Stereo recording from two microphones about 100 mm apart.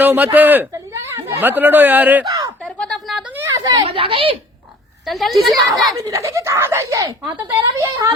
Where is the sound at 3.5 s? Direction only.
40° right (ahead or behind).